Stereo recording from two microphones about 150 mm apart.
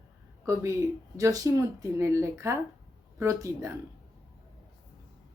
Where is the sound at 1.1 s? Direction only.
20° right (ahead or behind).